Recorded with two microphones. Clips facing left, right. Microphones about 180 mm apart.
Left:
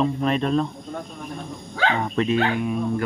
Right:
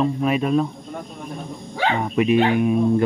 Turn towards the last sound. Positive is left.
turn(degrees=-20)  # may be behind; listen again after turning